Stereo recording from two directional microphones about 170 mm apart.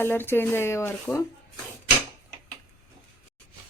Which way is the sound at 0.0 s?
10° left (ahead or behind).